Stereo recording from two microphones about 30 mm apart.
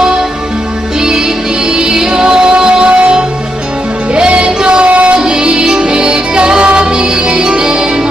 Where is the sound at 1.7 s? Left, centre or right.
Right.